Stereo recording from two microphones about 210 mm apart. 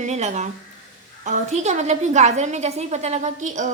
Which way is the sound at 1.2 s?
35° right (ahead or behind).